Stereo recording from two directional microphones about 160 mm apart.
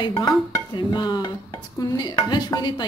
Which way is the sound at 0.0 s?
30° left (ahead or behind).